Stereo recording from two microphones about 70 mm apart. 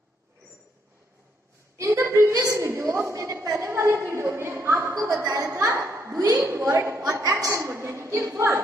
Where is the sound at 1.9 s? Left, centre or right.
Right.